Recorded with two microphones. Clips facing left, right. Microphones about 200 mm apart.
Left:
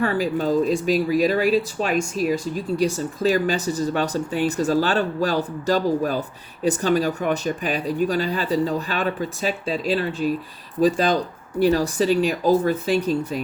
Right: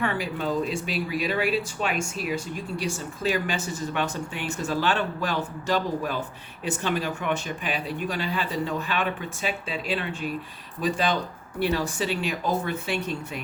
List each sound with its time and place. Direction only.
0.0 s speech: 40° left (ahead or behind)